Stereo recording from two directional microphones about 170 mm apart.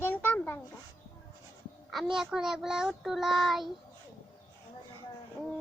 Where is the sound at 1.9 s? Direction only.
Centre (ahead or behind).